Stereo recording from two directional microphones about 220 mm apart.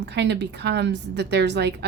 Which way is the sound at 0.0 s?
50° right (ahead or behind).